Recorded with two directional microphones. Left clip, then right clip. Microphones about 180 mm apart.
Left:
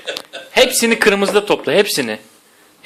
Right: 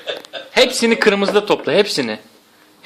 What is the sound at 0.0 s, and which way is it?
A man's voice, 10° left (ahead or behind).